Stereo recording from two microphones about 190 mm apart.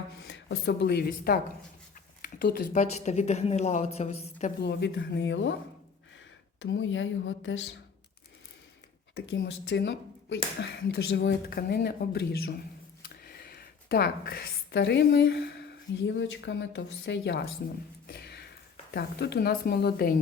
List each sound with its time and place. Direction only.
0.3 s speech: 65° left (ahead or behind)
2.8 s a woman's voice: 35° left (ahead or behind)
4.6 s speech: 65° left (ahead or behind)
6.6 s a woman's voice: 80° left
9.1 s speech: 65° left (ahead or behind)
13.2 s a sound: 55° left (ahead or behind)
16.0 s speech: 70° left (ahead or behind)
18.0 s a sound: 60° left (ahead or behind)
18.9 s speech: 60° left (ahead or behind)